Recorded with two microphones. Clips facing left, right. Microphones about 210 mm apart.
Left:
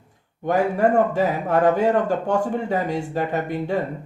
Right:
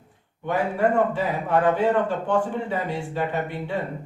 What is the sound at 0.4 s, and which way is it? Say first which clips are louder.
A man's voice: left 3 dB; 45° left (ahead or behind).